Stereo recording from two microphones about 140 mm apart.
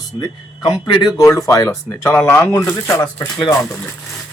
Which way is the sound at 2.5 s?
25° left (ahead or behind).